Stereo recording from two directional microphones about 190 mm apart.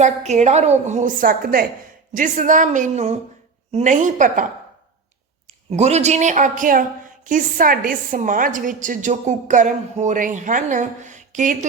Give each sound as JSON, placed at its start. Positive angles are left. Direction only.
{"t": 0.0, "sound": "a woman's voice", "side_deg": -35}
{"t": 5.7, "sound": "a woman's voice", "side_deg": -35}